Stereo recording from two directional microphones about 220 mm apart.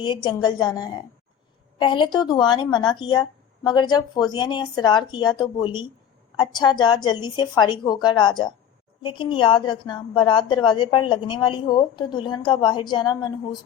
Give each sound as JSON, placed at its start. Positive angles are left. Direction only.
{"t": 0.0, "sound": "a woman's voice", "side_deg": 20}